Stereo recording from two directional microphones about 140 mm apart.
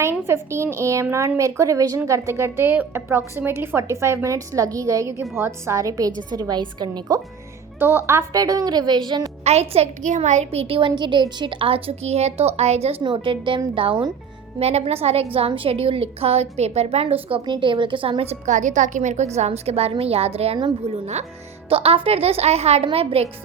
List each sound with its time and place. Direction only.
0.0 s a woman's voice: 15° right (ahead or behind)
7.8 s a woman's voice: 15° right (ahead or behind)
9.4 s a woman's voice: 50° right (ahead or behind)
18.4 s a woman's voice: 60° right (ahead or behind); by 23.3 s 45° right (ahead or behind)